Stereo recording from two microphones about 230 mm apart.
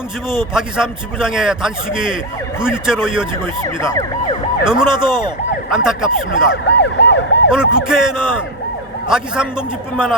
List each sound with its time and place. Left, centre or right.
0.5 s speech: centre
3.4 s speech: centre
4.6 s speech: centre
4.9 s speech: centre
5.7 s speech: centre
6.5 s emergency vehicle: left
7.5 s speech: centre